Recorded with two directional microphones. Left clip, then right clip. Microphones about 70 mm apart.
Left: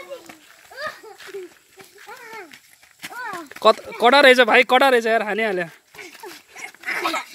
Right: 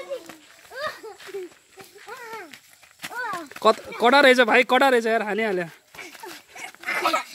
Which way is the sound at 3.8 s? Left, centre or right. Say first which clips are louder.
Left 3 dB; centre.